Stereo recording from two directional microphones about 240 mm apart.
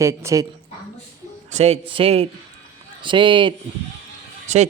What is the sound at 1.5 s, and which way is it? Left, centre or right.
A man's voice, right.